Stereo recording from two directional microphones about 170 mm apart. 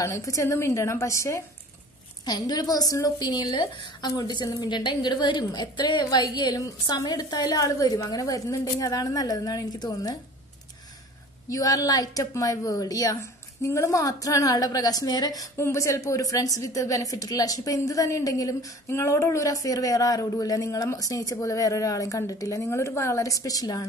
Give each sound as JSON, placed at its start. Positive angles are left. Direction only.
{"t": 0.0, "sound": "a woman's voice", "side_deg": 20}
{"t": 11.4, "sound": "speech", "side_deg": 20}